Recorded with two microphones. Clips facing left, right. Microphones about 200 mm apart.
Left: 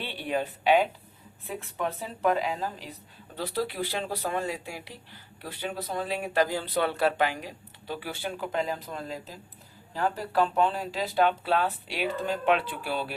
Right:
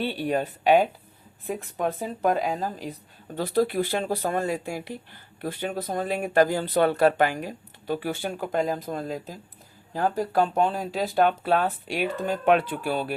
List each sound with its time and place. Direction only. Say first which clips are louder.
0.0 s speech: right 5 dB; 45° right (ahead or behind)